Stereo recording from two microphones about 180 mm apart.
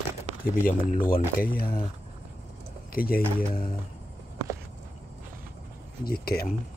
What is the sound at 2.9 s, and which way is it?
Speech, 55° left (ahead or behind).